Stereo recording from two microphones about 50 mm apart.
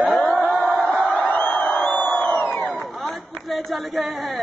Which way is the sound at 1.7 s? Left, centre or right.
Left.